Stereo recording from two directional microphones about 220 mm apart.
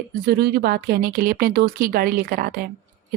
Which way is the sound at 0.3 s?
45° right (ahead or behind).